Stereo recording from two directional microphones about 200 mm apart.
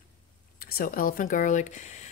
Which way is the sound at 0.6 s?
45° left (ahead or behind).